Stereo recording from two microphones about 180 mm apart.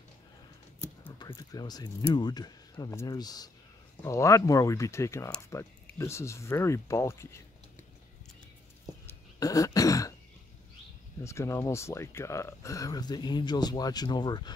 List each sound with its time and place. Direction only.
1.2 s speech: 20° left (ahead or behind)
9.4 s throat clearing: 20° left (ahead or behind)
11.2 s speech: 15° left (ahead or behind)